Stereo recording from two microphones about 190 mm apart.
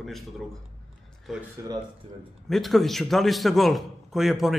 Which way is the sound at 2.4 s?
Centre (ahead or behind).